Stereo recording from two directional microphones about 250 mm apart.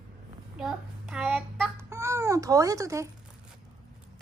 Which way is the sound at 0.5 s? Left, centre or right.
Centre.